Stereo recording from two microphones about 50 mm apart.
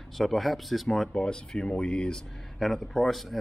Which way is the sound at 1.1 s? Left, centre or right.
Centre.